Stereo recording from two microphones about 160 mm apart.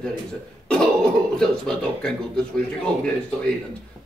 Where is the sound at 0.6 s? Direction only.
5° left (ahead or behind).